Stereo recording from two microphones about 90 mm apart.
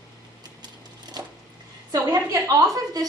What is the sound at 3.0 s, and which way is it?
Speech, 45° right (ahead or behind).